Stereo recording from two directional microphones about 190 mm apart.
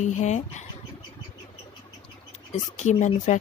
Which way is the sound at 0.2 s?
40° left (ahead or behind).